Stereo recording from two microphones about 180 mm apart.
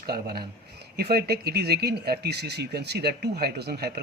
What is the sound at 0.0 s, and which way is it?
Speech, 60° right (ahead or behind).